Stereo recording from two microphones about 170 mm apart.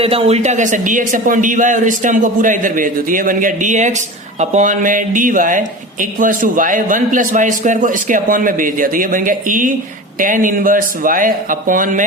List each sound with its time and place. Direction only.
0.0 s speech: 35° right (ahead or behind); by 12.0 s 50° right (ahead or behind)